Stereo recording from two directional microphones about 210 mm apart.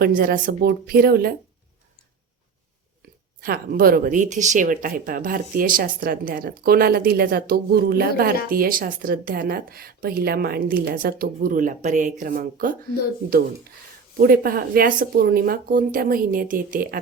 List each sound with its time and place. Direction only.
0.0 s speech: 45° right (ahead or behind)
3.4 s speech: 45° right (ahead or behind)
14.2 s speech: 45° right (ahead or behind)